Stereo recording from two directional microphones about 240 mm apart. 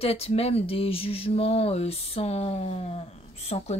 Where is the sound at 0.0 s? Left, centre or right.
Left.